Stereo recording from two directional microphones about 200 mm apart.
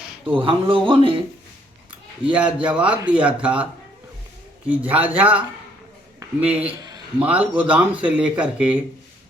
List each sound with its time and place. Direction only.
0.3 s speech: 25° right (ahead or behind)
1.9 s a sound: 5° right (ahead or behind)
2.6 s speech: 5° right (ahead or behind)
4.7 s a man's voice: 10° right (ahead or behind)